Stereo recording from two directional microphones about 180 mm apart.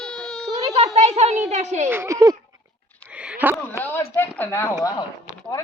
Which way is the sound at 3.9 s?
10° left (ahead or behind).